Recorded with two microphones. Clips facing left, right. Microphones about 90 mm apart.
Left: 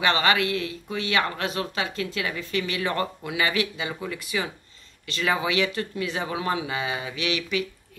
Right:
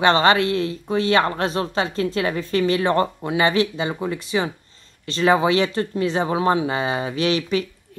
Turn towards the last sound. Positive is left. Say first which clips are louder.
# right 6 dB
turn(degrees=-35)  # may be behind; listen again after turning